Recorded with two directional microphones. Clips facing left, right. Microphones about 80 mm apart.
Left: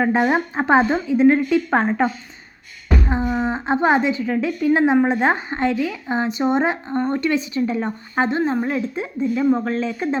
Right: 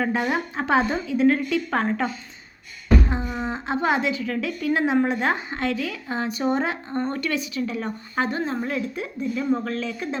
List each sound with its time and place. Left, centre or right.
0.0 s speech: left
3.1 s a woman's voice: left
5.8 s a woman's voice: centre; by 10.2 s left